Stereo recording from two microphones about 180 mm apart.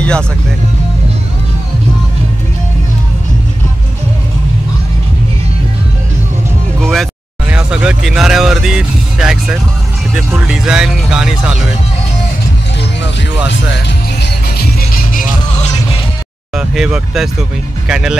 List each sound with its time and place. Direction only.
6.8 s music: centre (ahead or behind)
7.4 s speech: 5° right (ahead or behind)
13.0 s speech: 80° left
14.2 s music: 60° left (ahead or behind)
16.5 s speech: 5° right (ahead or behind)